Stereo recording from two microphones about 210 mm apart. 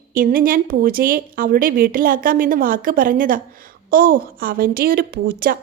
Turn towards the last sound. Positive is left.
turn(degrees=-45)  # may be behind; listen again after turning